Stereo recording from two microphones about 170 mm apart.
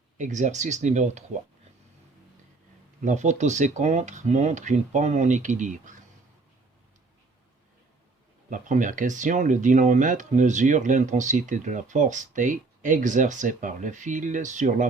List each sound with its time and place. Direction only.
0.2 s speech: 45° right (ahead or behind)
3.0 s speech: 45° right (ahead or behind)
8.4 s speech: 50° right (ahead or behind)